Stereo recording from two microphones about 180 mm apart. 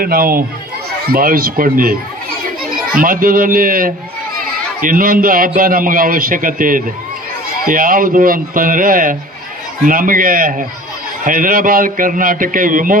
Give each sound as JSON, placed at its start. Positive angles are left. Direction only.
{"t": 0.0, "sound": "a man's voice", "side_deg": -55}
{"t": 3.0, "sound": "a man's voice", "side_deg": -50}